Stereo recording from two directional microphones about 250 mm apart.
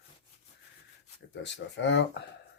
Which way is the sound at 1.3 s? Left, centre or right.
Left.